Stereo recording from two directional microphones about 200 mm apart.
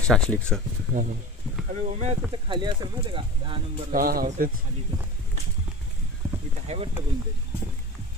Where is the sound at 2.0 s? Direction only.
30° right (ahead or behind).